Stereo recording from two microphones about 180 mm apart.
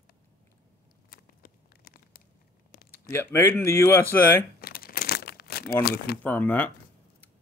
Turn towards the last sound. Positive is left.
turn(degrees=10)  # may be behind; listen again after turning